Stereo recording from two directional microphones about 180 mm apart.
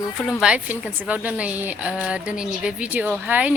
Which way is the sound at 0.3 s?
5° right (ahead or behind).